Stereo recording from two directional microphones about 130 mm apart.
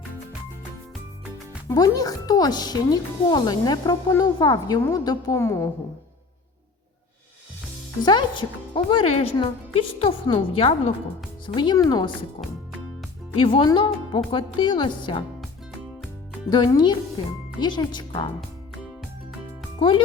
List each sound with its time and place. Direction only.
1.7 s a woman's voice: 30° left (ahead or behind)
8.0 s a woman's voice: 35° left (ahead or behind)
13.4 s speech: 40° left (ahead or behind)
16.5 s speech: 30° left (ahead or behind)